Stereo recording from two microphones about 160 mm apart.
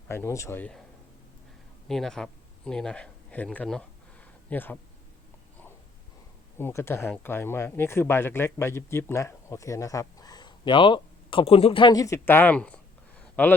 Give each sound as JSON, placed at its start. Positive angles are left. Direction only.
{"t": 0.1, "sound": "speech", "side_deg": 15}
{"t": 1.9, "sound": "speech", "side_deg": 5}
{"t": 6.6, "sound": "speech", "side_deg": 15}